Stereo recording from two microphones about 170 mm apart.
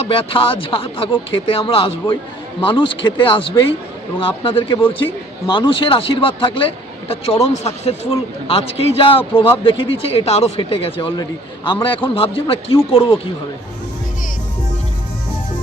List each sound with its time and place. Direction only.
0.0 s a man's voice: 35° left (ahead or behind)